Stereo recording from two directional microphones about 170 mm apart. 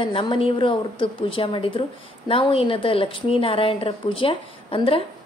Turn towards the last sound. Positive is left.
turn(degrees=30)  # may be behind; listen again after turning